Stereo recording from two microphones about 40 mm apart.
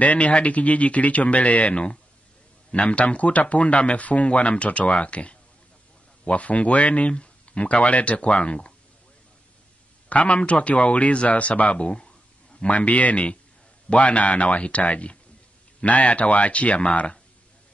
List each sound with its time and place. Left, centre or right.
0.0 s speech: left
10.0 s speech: left